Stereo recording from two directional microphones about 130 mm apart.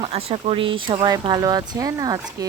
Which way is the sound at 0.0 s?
50° right (ahead or behind).